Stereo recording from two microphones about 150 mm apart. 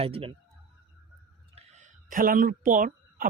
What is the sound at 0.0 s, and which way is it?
Speech, 40° right (ahead or behind).